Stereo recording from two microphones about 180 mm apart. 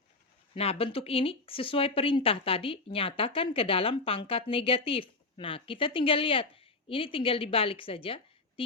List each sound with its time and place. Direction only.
0.5 s speech: 35° left (ahead or behind)